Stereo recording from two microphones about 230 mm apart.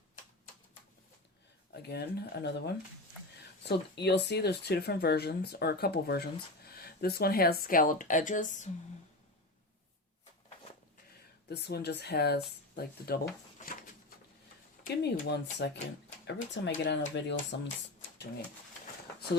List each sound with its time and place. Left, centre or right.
1.7 s speech: left
11.4 s speech: left
14.8 s speech: left